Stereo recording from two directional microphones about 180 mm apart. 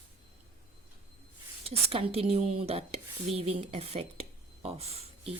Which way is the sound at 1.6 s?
30° right (ahead or behind).